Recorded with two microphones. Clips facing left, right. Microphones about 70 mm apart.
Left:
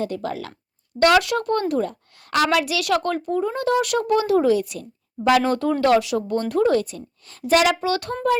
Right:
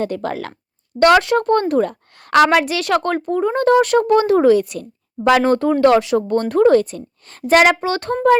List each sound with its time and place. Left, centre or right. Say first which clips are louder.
0.0 s speech: right 4 dB; right
2.5 s speech: right 4 dB; right
5.5 s speech: right 5 dB; right
6.2 s speech: right 6 dB; right